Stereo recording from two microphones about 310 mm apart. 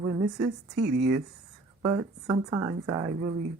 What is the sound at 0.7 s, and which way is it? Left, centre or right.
Speech, right.